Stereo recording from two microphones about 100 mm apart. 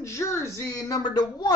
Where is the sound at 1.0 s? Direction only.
45° left (ahead or behind).